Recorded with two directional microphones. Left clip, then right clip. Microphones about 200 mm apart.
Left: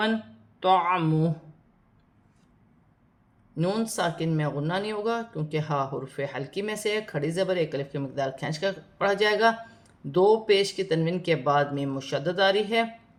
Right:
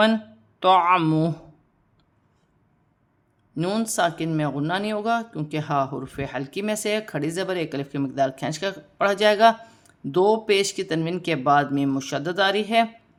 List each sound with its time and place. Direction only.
0.6 s speech: 35° right (ahead or behind)
3.5 s speech: 35° right (ahead or behind)